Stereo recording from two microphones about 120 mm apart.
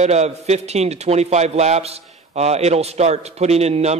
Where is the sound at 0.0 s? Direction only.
65° right (ahead or behind).